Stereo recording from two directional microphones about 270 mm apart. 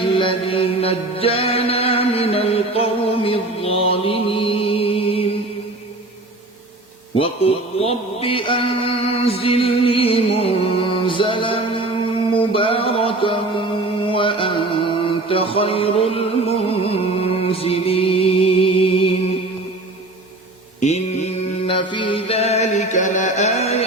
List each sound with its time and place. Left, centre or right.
0.0 s music: centre
7.2 s a sound: left
12.5 s mantra: centre
20.8 s mantra: left
21.7 s chant: centre